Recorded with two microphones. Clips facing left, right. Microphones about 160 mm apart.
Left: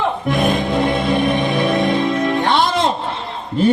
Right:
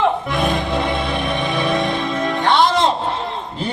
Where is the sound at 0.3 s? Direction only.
55° left (ahead or behind).